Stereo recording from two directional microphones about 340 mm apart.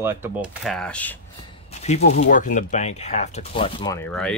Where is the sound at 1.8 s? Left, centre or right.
Left.